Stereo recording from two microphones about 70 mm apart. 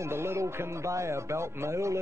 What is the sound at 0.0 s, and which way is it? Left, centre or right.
Speech, right.